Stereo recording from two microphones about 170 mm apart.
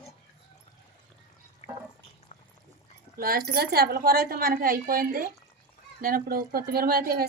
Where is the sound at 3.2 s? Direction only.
65° right (ahead or behind).